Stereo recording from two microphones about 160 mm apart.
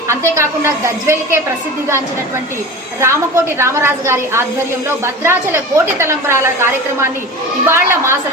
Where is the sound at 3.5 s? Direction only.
15° right (ahead or behind).